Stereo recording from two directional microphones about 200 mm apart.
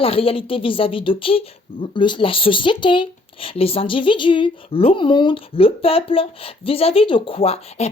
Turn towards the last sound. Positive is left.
turn(degrees=30)  # may be behind; listen again after turning